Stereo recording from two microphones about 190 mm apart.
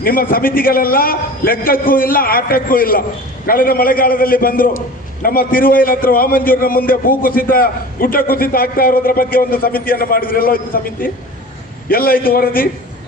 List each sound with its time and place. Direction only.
0.0 s a man's voice: 50° left (ahead or behind)
11.9 s a man's voice: 50° left (ahead or behind)